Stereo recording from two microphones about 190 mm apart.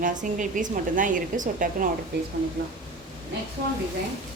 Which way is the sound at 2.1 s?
65° right (ahead or behind).